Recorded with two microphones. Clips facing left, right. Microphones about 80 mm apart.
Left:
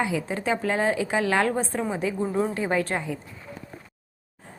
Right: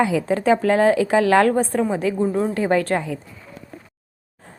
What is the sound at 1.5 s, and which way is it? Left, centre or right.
A woman's voice, right.